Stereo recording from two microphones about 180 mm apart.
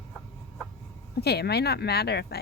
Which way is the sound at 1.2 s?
60° left (ahead or behind).